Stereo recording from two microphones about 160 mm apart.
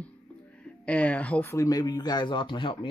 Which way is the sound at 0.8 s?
10° left (ahead or behind).